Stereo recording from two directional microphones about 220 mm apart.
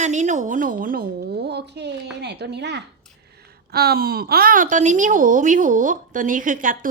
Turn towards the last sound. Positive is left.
turn(degrees=-40)  # may be behind; listen again after turning